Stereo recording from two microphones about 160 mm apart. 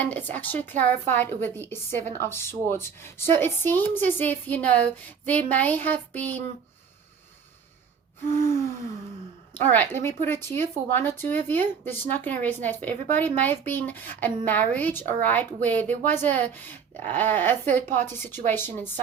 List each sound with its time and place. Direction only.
0.0 s a woman's voice: 10° left (ahead or behind)
8.4 s a woman's voice: 15° left (ahead or behind)